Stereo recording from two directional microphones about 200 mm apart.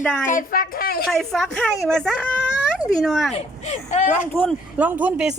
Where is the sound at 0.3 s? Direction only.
45° left (ahead or behind).